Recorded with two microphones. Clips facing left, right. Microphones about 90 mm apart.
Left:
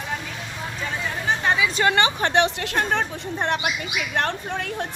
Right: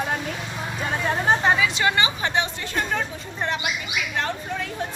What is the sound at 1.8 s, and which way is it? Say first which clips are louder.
A woman's voice: left 2 dB; 55° left (ahead or behind).